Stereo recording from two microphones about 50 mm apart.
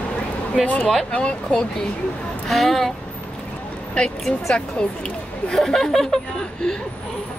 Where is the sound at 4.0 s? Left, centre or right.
Left.